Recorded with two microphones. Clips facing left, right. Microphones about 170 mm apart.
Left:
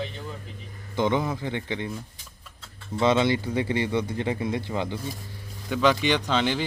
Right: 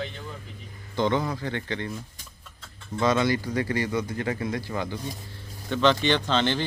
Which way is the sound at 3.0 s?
25° left (ahead or behind).